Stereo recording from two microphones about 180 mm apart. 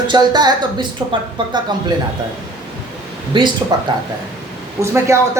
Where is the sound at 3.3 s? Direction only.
25° right (ahead or behind).